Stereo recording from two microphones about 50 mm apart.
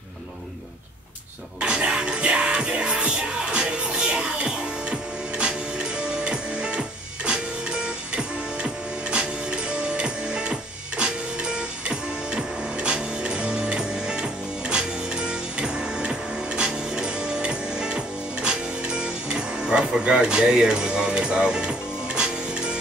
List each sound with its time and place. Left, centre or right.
1.6 s music: right